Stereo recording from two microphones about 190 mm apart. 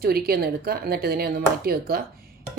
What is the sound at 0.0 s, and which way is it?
Speech, 55° right (ahead or behind).